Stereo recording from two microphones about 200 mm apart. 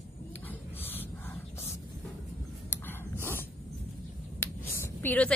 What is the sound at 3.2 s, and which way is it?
Dog, 10° left (ahead or behind).